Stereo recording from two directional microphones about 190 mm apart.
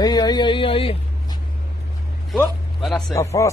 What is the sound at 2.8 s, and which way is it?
Speech, centre (ahead or behind).